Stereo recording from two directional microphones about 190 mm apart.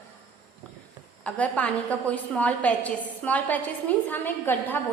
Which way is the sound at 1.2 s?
5° left (ahead or behind).